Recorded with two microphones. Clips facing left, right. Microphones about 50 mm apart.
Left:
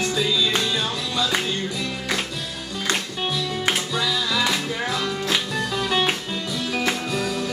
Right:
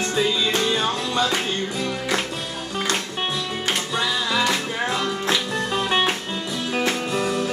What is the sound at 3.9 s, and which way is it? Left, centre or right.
Music, right.